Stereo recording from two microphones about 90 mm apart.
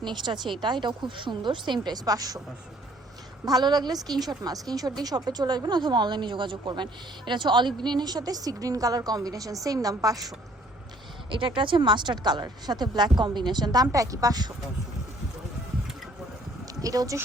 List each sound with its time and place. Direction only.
0.0 s a woman's voice: 60° right (ahead or behind)
3.4 s a woman's voice: 45° right (ahead or behind)
11.3 s a woman's voice: 70° right (ahead or behind); by 14.5 s 45° right (ahead or behind)
16.8 s a woman's voice: 40° right (ahead or behind)